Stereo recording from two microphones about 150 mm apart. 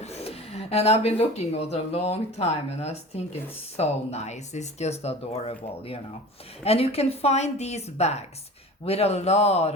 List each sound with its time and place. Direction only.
0.0 s speech: 45° left (ahead or behind)